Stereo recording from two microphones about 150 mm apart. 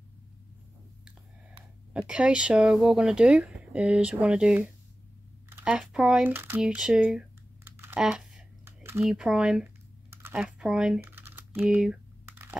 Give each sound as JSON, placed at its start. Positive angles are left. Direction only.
{"t": 2.0, "sound": "speech", "side_deg": -5}
{"t": 7.7, "sound": "typing", "side_deg": -15}
{"t": 8.0, "sound": "typing", "side_deg": -5}
{"t": 8.6, "sound": "typing", "side_deg": -15}
{"t": 9.0, "sound": "speech", "side_deg": -5}
{"t": 12.3, "sound": "a sound", "side_deg": -15}